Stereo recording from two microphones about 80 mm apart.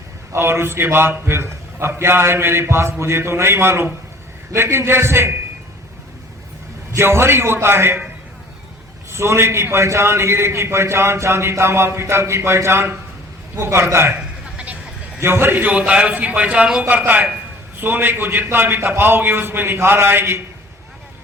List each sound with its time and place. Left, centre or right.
0.3 s a man's voice: right
6.9 s a man's voice: right
9.0 s a man's voice: right
14.5 s vehicle: centre
15.2 s a man's voice: right